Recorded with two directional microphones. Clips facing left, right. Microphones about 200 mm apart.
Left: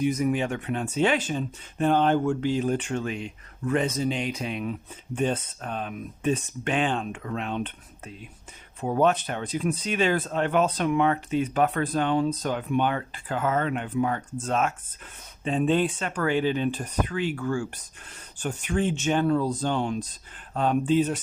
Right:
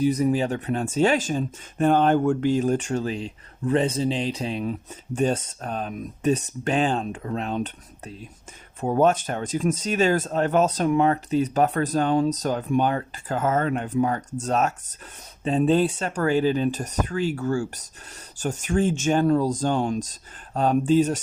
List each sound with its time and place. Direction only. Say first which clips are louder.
0.0 s speech: right 3 dB; 35° right (ahead or behind)